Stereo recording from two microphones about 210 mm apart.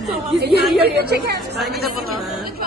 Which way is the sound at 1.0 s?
50° right (ahead or behind).